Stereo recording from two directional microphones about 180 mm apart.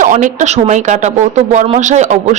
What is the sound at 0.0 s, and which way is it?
Speech, 45° right (ahead or behind).